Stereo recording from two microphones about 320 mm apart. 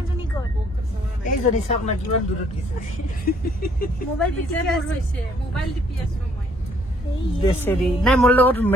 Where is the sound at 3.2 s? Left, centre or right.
Left.